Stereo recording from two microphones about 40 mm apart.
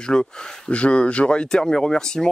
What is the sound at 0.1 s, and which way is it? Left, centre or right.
Speech, left.